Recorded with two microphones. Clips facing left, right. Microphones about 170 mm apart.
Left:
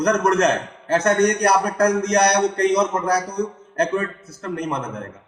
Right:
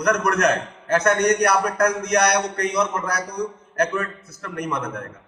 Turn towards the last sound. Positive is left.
turn(degrees=30)  # may be behind; listen again after turning